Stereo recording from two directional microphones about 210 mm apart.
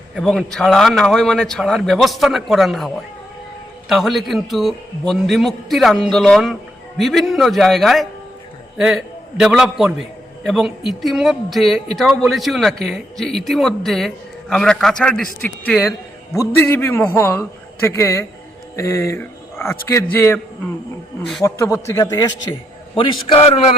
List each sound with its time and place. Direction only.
0.2 s a man's voice: centre (ahead or behind)
21.4 s a man's voice: 15° left (ahead or behind); by 23.7 s 30° left (ahead or behind)